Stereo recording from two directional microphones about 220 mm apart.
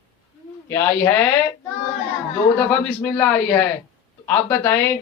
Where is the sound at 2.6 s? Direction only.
5° left (ahead or behind).